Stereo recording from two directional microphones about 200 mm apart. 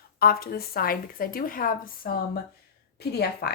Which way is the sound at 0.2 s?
50° left (ahead or behind).